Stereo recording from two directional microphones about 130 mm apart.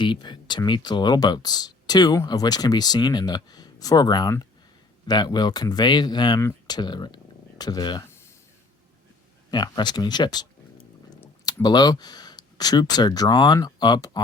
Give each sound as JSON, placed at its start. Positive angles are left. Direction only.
{"t": 0.0, "sound": "speech", "side_deg": 35}
{"t": 9.5, "sound": "speech", "side_deg": 35}
{"t": 11.4, "sound": "speech", "side_deg": 30}